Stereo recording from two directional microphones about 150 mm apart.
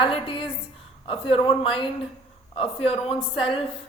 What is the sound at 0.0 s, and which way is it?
A woman's voice, 35° left (ahead or behind).